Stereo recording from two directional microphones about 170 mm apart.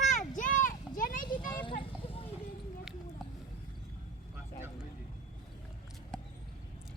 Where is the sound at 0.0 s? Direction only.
50° left (ahead or behind).